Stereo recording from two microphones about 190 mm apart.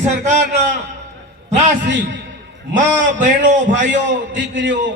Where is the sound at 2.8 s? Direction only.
40° right (ahead or behind).